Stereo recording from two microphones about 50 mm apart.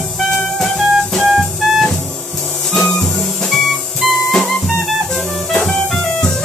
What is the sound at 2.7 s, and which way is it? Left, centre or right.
Music, centre.